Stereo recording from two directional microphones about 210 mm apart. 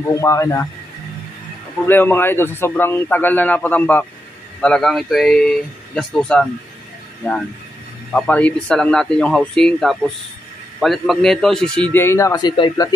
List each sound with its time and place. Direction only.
0.1 s a man's voice: 15° left (ahead or behind)
1.9 s a man's voice: 10° left (ahead or behind)
8.1 s a man's voice: 5° left (ahead or behind)